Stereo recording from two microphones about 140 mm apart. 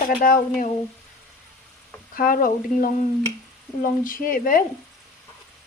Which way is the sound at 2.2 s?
90° left.